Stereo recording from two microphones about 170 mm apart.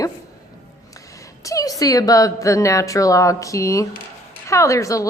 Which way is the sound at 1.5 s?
20° left (ahead or behind).